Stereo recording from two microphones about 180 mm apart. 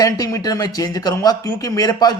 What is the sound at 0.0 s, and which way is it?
Speech, 20° left (ahead or behind).